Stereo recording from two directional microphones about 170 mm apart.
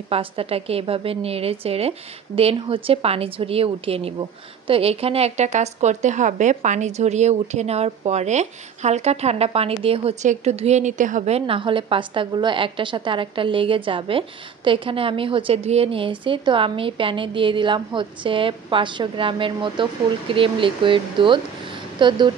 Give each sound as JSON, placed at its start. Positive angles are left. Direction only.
{"t": 0.1, "sound": "a woman's voice", "side_deg": -35}